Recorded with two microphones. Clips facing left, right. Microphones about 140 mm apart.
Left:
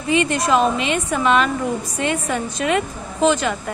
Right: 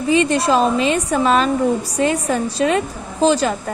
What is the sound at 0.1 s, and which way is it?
A woman's voice, 30° right (ahead or behind).